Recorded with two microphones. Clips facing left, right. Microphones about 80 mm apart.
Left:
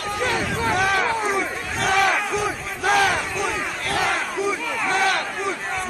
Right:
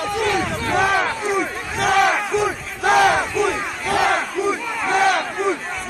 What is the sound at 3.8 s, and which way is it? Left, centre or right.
Battle cry, centre.